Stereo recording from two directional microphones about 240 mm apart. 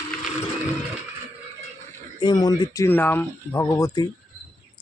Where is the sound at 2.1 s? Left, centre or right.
Centre.